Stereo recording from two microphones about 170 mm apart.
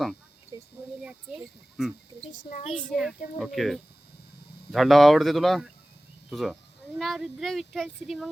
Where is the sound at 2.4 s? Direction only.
45° left (ahead or behind).